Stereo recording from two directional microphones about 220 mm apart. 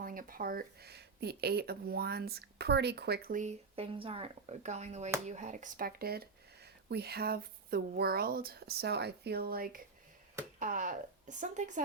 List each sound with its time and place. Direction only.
0.0 s speech: 40° right (ahead or behind)